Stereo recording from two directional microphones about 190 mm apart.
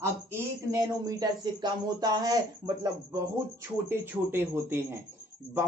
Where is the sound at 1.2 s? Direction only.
20° right (ahead or behind).